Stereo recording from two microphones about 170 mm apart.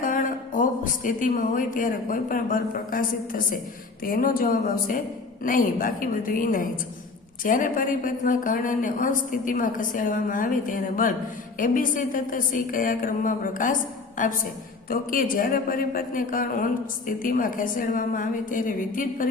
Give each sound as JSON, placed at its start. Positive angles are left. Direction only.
{"t": 0.0, "sound": "a man's voice", "side_deg": 50}